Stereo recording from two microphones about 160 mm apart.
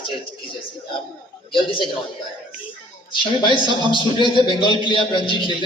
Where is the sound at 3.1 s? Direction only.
30° left (ahead or behind).